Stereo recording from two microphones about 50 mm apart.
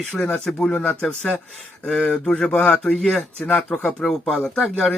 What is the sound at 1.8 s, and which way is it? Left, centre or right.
Speech, centre.